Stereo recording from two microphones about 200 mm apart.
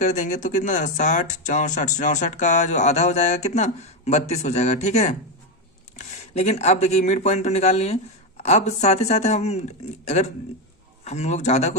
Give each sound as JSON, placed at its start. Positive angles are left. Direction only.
{"t": 0.0, "sound": "speech", "side_deg": 35}